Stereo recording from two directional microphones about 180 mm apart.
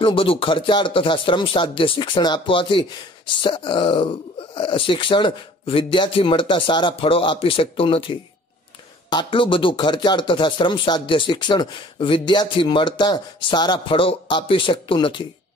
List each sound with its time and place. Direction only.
0.0 s speech: 30° left (ahead or behind)